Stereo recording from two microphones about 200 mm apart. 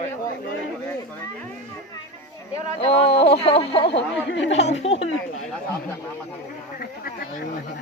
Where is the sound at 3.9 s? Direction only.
65° left (ahead or behind).